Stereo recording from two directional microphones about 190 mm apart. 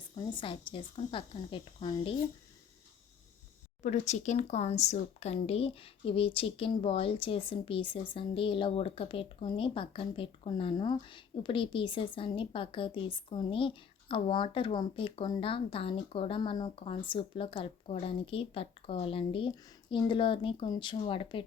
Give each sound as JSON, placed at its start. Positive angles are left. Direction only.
{"t": 0.3, "sound": "speech", "side_deg": 25}
{"t": 3.8, "sound": "speech", "side_deg": 40}